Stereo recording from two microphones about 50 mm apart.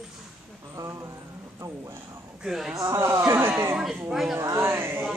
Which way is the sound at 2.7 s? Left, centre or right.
Right.